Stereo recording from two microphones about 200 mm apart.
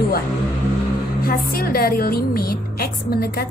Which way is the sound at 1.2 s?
50° left (ahead or behind).